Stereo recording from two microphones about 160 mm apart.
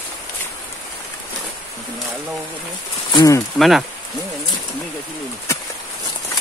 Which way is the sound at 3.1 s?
25° left (ahead or behind).